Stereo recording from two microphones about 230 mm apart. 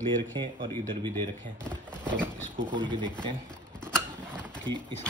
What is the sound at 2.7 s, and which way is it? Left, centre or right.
Speech, centre.